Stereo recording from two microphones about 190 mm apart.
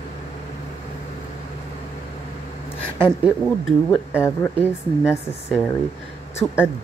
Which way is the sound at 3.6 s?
10° left (ahead or behind).